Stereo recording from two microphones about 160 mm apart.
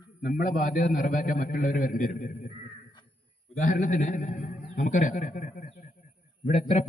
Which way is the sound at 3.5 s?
55° left (ahead or behind).